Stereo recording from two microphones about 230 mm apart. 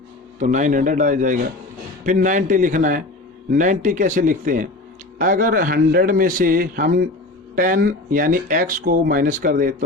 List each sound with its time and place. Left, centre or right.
0.3 s speech: right